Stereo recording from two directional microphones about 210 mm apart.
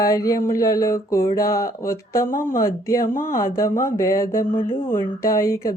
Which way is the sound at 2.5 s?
15° left (ahead or behind).